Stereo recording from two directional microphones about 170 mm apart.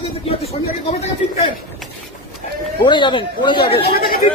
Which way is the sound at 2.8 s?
30° left (ahead or behind).